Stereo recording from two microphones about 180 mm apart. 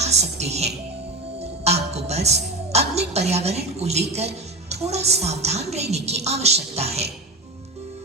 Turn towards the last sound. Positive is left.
turn(degrees=-35)  # may be behind; listen again after turning